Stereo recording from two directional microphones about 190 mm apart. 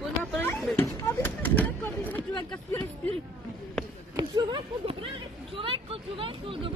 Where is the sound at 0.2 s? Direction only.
10° left (ahead or behind).